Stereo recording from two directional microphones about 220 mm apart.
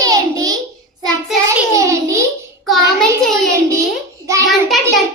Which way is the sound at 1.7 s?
15° right (ahead or behind).